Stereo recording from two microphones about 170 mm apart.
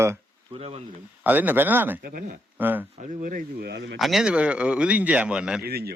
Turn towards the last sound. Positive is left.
turn(degrees=-65)  # may be behind; listen again after turning